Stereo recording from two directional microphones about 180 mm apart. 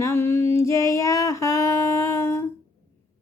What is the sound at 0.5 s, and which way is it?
Female singing, 15° left (ahead or behind).